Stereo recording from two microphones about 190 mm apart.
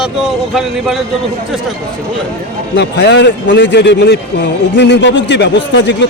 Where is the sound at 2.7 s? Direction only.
65° left (ahead or behind).